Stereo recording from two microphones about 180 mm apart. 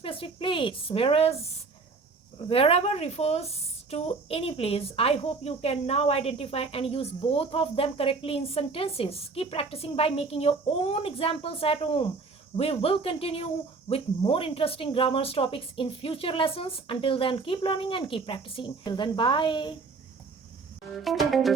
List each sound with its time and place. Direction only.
0.0 s a woman's voice: 30° left (ahead or behind)
2.5 s a woman's voice: 30° left (ahead or behind)
20.9 s music: centre (ahead or behind)